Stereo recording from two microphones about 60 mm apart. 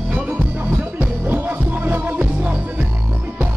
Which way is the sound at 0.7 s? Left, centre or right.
Right.